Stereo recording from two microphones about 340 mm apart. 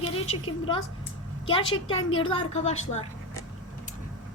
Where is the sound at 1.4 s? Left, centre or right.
Centre.